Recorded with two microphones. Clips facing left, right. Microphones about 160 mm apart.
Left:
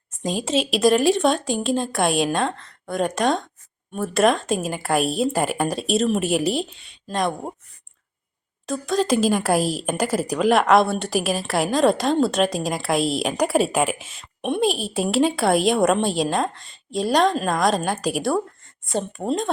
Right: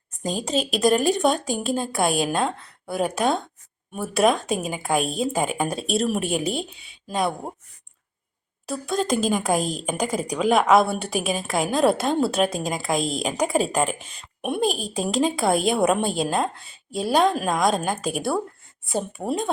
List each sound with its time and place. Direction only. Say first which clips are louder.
0.1 s a woman's voice: left 2 dB; centre (ahead or behind)
8.6 s a woman's voice: left 3 dB; centre (ahead or behind)